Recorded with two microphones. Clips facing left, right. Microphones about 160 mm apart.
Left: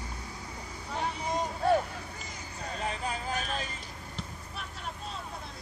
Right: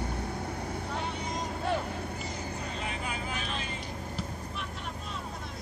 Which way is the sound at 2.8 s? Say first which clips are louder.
Left 5 dB; 40° left (ahead or behind).